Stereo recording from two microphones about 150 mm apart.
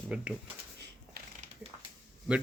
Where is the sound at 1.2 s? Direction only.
90° right.